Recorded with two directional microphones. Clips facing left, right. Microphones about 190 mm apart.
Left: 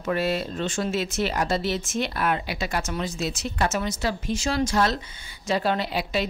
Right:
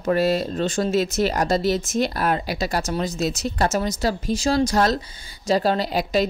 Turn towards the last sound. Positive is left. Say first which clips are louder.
# right 5 dB
turn(degrees=-40)  # may be behind; listen again after turning